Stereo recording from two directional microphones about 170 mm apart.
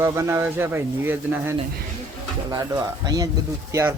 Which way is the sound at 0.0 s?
15° right (ahead or behind).